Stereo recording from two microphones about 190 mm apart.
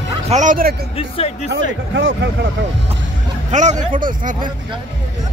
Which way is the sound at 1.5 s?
70° right (ahead or behind).